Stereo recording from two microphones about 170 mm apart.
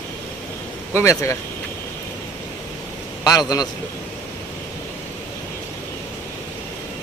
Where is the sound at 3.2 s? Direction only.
20° left (ahead or behind).